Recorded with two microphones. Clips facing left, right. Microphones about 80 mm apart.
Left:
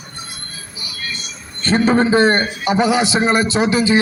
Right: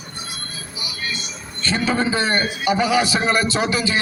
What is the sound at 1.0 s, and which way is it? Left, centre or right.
Music, centre.